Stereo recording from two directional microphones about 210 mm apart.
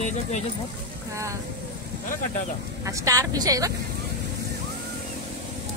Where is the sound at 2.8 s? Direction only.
15° right (ahead or behind).